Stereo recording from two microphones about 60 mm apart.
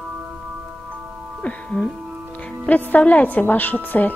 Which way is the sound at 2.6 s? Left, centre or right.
Left.